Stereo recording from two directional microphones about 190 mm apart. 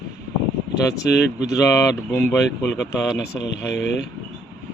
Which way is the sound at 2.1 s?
10° left (ahead or behind).